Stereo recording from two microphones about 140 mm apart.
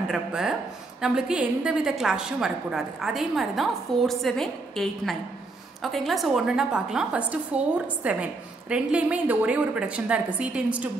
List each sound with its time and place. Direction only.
0.1 s a woman's voice: 5° right (ahead or behind)